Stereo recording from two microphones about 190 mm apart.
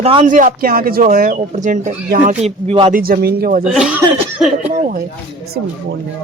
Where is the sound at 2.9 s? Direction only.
50° right (ahead or behind).